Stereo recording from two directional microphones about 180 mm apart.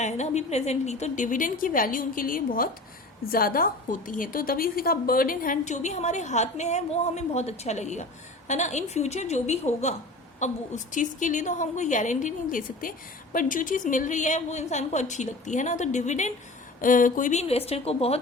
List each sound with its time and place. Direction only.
0.0 s a woman's voice: 40° left (ahead or behind)
17.7 s a woman's voice: 35° left (ahead or behind)